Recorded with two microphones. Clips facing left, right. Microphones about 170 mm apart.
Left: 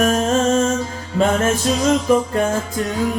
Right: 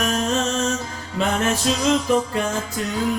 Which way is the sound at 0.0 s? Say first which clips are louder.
Left 6 dB; 50° left (ahead or behind).